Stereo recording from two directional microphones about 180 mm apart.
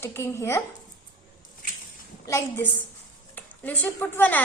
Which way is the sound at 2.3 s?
15° left (ahead or behind).